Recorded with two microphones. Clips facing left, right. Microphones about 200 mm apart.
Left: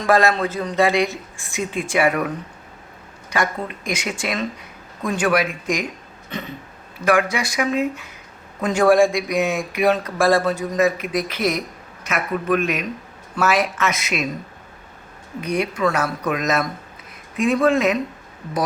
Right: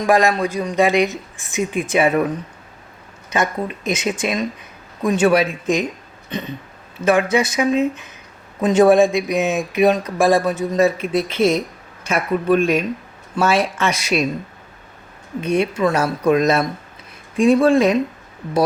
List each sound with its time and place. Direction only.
0.0 s a woman's voice: 15° right (ahead or behind)
10.8 s speech: 30° right (ahead or behind)
15.4 s speech: 25° right (ahead or behind)